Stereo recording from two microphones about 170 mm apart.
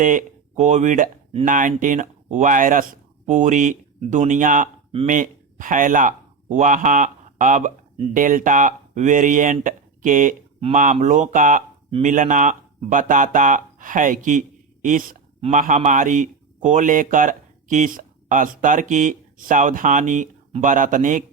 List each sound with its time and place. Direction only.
0.0 s speech: 50° right (ahead or behind)
15.4 s speech: 40° right (ahead or behind)